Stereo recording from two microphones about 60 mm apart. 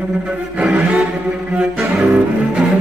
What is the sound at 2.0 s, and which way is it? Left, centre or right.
Cello, centre.